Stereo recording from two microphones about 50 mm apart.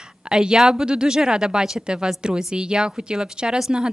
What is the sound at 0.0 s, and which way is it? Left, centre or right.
A woman's voice, centre.